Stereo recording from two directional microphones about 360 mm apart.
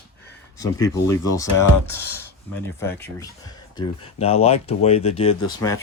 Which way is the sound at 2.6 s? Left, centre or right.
Centre.